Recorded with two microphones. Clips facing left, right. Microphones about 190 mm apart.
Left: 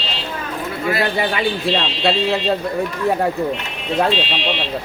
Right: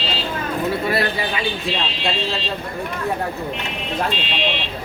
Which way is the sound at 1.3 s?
65° left (ahead or behind).